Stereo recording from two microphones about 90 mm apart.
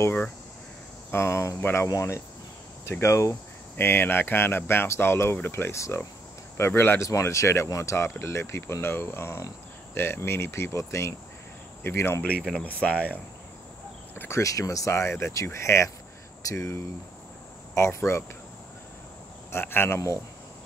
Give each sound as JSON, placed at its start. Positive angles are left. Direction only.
{"t": 1.1, "sound": "speech", "side_deg": 30}
{"t": 3.7, "sound": "speech", "side_deg": 25}
{"t": 12.8, "sound": "speech", "side_deg": 15}
{"t": 14.1, "sound": "speech", "side_deg": 25}
{"t": 19.5, "sound": "speech", "side_deg": 25}